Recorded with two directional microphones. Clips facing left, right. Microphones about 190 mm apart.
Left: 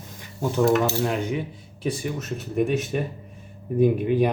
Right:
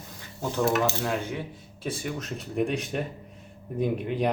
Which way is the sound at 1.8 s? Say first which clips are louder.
Left 4 dB; 10° left (ahead or behind).